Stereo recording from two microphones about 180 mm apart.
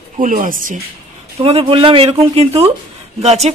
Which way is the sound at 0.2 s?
45° right (ahead or behind).